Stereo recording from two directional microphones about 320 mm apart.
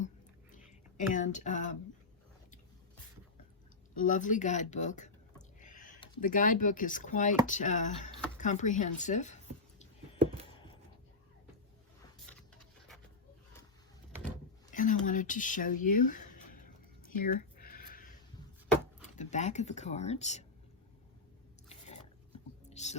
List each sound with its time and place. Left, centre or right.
0.5 s speech: left
3.9 s speech: left
5.5 s a sound: left
6.0 s speech: left
14.7 s speech: left
17.2 s bleat: left
19.0 s speech: left
22.7 s music: left